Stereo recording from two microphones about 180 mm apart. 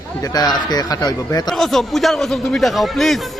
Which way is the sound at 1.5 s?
Centre (ahead or behind).